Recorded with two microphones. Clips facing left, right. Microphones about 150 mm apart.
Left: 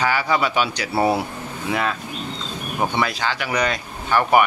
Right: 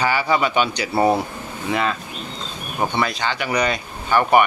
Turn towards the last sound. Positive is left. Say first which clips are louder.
# right 1 dB
turn(degrees=0)  # may be behind; listen again after turning